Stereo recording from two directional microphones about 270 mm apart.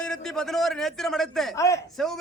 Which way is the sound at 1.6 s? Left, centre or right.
Centre.